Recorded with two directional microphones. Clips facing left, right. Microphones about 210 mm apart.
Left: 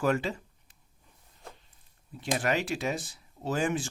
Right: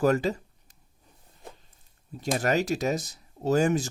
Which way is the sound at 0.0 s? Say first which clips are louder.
Right 5 dB; 40° right (ahead or behind).